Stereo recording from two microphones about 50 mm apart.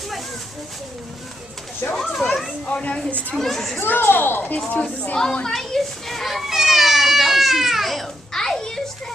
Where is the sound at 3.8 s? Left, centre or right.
Left.